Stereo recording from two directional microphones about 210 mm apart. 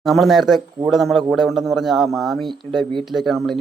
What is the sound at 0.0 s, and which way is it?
A man's voice, centre (ahead or behind).